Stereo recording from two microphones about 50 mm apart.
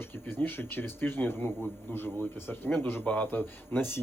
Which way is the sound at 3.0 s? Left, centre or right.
Left.